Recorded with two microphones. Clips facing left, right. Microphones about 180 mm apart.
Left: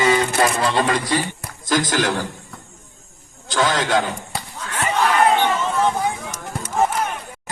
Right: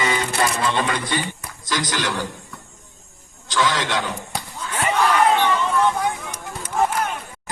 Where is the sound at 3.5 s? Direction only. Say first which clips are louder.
Left 3 dB; 45° left (ahead or behind).